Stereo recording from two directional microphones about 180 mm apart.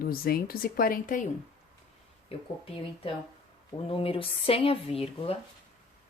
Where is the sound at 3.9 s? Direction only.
30° left (ahead or behind).